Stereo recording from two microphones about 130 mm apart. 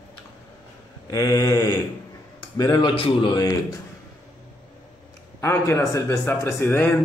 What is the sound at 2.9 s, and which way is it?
Speech, 40° left (ahead or behind).